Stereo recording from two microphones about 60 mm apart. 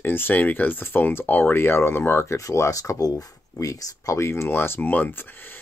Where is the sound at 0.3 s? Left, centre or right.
Left.